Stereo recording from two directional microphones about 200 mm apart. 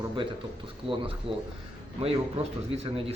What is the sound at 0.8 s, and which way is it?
Speech, centre (ahead or behind).